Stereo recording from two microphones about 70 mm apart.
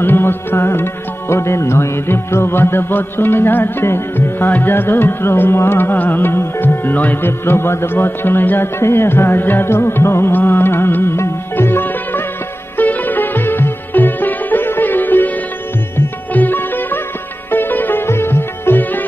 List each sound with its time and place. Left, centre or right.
0.0 s music: left
16.3 s sitar: left